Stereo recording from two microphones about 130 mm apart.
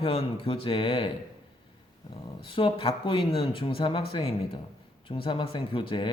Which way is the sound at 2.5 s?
40° left (ahead or behind).